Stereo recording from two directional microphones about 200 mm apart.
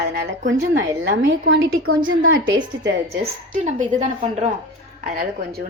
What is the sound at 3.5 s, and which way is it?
Speech, 40° right (ahead or behind).